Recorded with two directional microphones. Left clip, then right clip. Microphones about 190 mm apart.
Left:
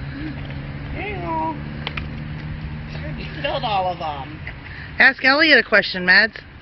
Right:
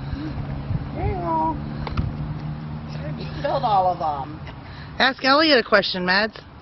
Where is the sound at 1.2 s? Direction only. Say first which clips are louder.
Right 2 dB; 15° left (ahead or behind).